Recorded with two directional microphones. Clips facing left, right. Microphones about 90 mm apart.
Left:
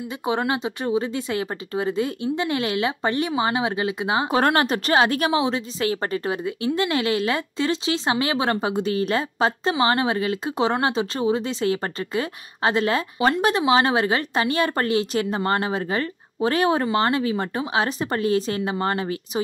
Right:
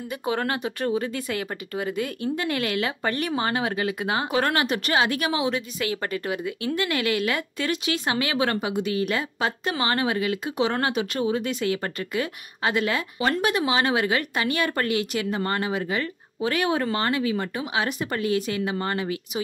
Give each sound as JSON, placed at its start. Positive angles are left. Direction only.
{"t": 0.2, "sound": "a woman's voice", "side_deg": 20}
{"t": 4.3, "sound": "a woman's voice", "side_deg": 30}